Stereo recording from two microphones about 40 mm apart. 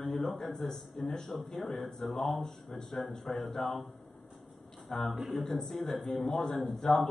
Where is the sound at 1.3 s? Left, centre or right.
Centre.